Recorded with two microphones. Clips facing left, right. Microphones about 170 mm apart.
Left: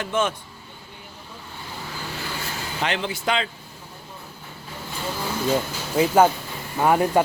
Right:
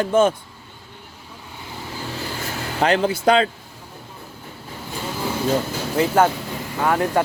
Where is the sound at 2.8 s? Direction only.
40° right (ahead or behind).